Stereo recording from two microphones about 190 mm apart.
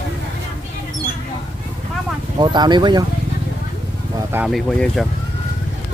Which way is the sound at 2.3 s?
20° right (ahead or behind).